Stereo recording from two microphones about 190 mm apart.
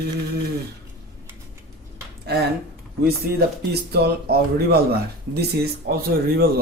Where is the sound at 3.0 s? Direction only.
55° right (ahead or behind).